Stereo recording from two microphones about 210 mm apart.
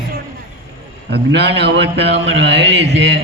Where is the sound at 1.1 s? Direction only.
55° right (ahead or behind).